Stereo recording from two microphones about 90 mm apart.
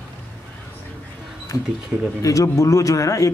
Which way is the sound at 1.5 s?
40° left (ahead or behind).